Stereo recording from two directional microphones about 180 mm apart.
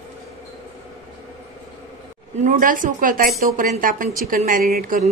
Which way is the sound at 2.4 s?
50° right (ahead or behind).